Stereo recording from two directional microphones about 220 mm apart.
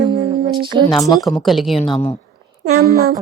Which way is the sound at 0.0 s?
20° right (ahead or behind).